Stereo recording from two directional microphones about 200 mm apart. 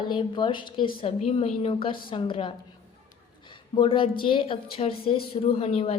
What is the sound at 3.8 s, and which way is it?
A woman's voice, 25° left (ahead or behind).